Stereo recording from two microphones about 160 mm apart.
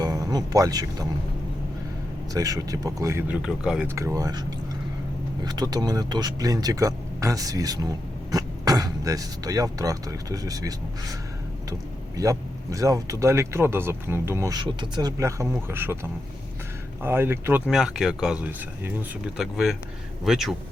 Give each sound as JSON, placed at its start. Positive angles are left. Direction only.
{"t": 0.0, "sound": "speech", "side_deg": -25}
{"t": 2.3, "sound": "speech", "side_deg": -20}
{"t": 3.8, "sound": "speech", "side_deg": -20}
{"t": 5.5, "sound": "speech", "side_deg": -25}
{"t": 12.1, "sound": "speech", "side_deg": -20}
{"t": 17.0, "sound": "speech", "side_deg": -15}
{"t": 17.7, "sound": "speech", "side_deg": 0}